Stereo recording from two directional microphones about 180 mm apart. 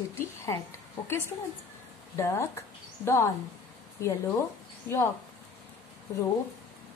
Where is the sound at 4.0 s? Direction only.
15° left (ahead or behind).